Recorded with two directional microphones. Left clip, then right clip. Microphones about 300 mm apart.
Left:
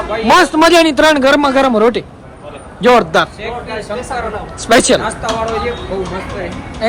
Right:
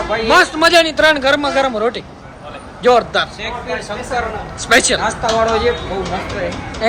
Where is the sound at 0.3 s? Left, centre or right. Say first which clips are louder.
Left 2 dB; centre.